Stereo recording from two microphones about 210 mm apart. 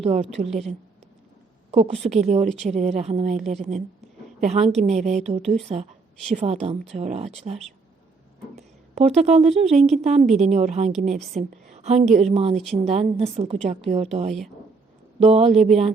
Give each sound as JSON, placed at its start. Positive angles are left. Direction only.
{"t": 0.0, "sound": "speech", "side_deg": -30}
{"t": 1.7, "sound": "speech", "side_deg": -30}
{"t": 9.0, "sound": "speech", "side_deg": -30}
{"t": 10.2, "sound": "a woman's voice", "side_deg": 0}
{"t": 10.5, "sound": "a woman's voice", "side_deg": -30}